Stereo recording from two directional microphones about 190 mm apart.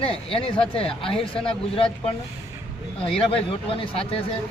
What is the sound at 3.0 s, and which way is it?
Speech, 30° left (ahead or behind).